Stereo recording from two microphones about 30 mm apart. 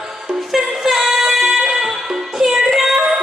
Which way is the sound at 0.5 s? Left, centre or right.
Centre.